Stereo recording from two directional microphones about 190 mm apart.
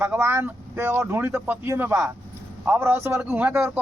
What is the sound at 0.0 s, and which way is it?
Speech, 10° right (ahead or behind).